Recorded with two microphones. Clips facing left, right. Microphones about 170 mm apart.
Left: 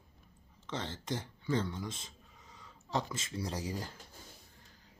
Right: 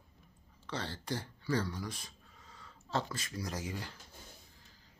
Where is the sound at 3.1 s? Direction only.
25° left (ahead or behind).